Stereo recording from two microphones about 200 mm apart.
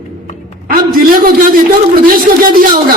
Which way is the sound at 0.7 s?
45° right (ahead or behind).